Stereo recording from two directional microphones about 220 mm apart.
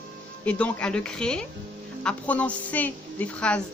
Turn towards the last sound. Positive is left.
turn(degrees=5)  # may be behind; listen again after turning